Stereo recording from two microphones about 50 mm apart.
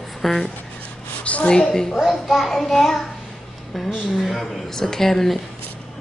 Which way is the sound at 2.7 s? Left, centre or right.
Left.